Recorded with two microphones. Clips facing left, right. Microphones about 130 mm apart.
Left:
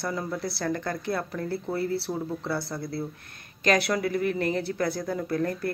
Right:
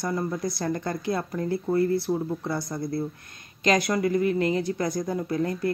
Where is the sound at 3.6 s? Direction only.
55° left (ahead or behind).